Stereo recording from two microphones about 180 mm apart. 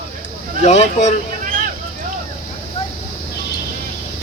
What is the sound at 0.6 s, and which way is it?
Speech, 40° left (ahead or behind).